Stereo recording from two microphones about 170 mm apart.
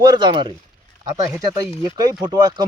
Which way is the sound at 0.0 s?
25° right (ahead or behind).